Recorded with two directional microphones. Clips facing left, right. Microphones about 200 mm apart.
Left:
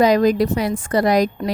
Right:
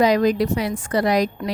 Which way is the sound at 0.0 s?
45° left (ahead or behind).